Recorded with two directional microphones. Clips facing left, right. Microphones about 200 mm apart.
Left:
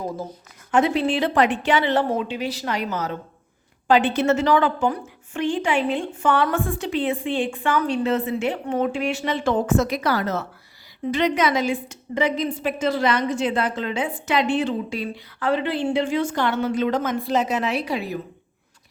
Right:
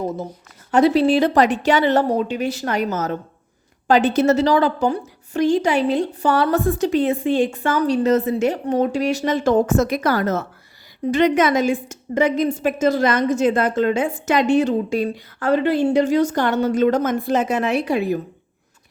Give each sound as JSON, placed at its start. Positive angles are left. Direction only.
{"t": 0.7, "sound": "a woman's voice", "side_deg": -35}